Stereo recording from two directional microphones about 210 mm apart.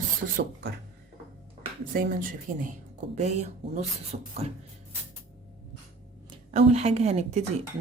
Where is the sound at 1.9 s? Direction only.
40° right (ahead or behind).